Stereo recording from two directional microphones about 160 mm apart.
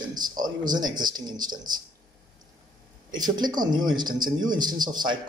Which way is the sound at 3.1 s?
25° right (ahead or behind).